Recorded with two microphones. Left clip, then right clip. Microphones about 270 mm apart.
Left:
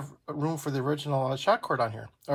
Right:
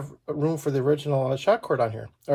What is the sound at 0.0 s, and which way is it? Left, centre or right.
Speech, centre.